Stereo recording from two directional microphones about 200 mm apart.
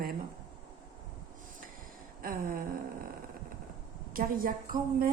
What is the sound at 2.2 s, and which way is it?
Speech, 45° right (ahead or behind).